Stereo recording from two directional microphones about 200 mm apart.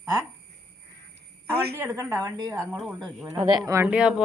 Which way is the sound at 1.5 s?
50° right (ahead or behind).